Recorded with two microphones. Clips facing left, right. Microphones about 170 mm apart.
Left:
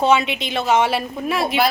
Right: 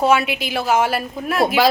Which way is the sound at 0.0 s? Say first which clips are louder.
Even; 5° right (ahead or behind).